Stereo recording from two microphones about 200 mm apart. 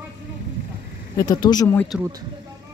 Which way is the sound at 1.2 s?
20° left (ahead or behind).